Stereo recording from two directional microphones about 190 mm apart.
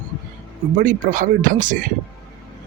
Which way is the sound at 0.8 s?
45° right (ahead or behind).